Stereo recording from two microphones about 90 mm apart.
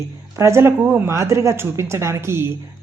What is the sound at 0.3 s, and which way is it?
A woman's voice, 30° right (ahead or behind).